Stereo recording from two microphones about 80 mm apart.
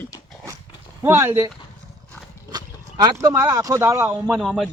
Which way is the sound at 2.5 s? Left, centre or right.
Right.